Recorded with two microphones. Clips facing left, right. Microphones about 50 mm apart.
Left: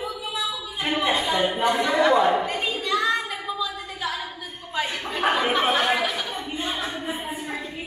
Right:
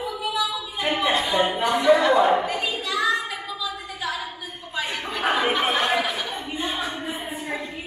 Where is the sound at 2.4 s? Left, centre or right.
Left.